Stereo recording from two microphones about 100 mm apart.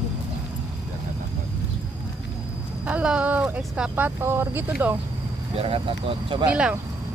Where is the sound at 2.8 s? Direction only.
10° right (ahead or behind).